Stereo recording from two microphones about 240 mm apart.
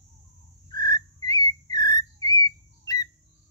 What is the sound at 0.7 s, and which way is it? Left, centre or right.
Whistle, centre.